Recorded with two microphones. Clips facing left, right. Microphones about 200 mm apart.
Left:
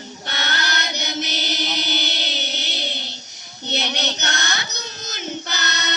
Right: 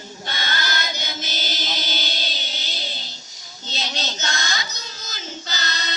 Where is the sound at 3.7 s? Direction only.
65° left (ahead or behind).